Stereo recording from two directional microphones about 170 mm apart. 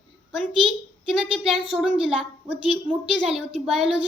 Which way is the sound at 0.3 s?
Centre (ahead or behind).